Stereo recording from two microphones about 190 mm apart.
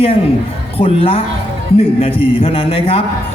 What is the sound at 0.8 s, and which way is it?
Speech, 30° left (ahead or behind).